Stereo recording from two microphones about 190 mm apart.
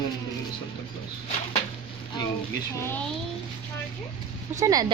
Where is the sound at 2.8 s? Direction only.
10° left (ahead or behind).